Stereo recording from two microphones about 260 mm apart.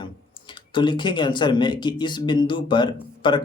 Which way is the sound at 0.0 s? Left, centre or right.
Centre.